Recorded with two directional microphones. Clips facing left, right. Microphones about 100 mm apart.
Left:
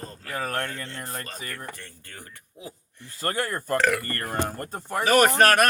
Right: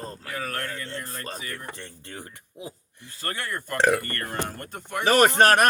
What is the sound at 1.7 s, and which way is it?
Speech, 25° right (ahead or behind).